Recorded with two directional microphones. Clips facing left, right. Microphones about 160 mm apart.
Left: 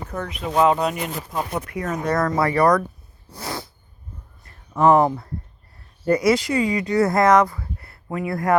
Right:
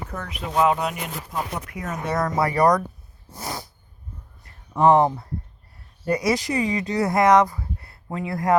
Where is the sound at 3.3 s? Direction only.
20° right (ahead or behind).